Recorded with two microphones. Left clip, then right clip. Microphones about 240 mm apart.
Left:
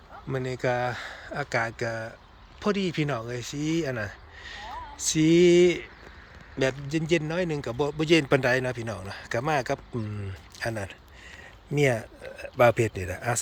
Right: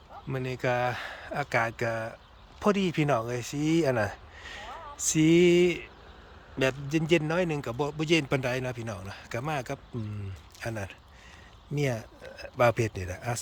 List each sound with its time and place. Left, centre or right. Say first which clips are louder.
0.3 s speech: left 2 dB; centre